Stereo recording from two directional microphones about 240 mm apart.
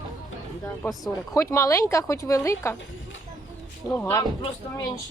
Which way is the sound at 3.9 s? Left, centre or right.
Centre.